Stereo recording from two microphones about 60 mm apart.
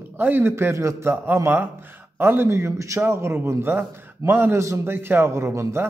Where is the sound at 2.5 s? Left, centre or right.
Right.